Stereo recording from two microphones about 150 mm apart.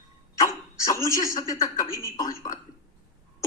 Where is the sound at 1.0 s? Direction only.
20° left (ahead or behind).